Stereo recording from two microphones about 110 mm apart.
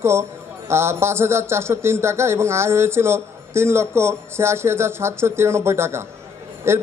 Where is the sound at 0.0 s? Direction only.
25° right (ahead or behind).